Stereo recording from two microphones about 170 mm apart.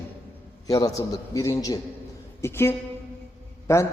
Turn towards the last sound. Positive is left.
turn(degrees=15)  # may be behind; listen again after turning